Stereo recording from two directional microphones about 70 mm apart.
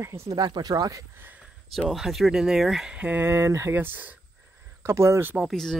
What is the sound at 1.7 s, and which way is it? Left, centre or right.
Speech, centre.